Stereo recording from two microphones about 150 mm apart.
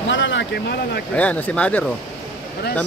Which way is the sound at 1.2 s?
10° left (ahead or behind).